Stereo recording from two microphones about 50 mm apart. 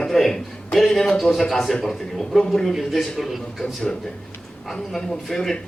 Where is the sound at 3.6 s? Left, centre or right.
Centre.